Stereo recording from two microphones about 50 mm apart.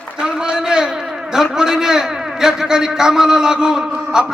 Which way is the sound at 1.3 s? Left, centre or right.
Centre.